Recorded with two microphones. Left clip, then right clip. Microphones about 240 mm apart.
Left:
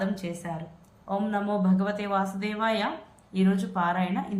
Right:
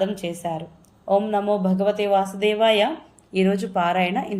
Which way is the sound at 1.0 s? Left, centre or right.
Left.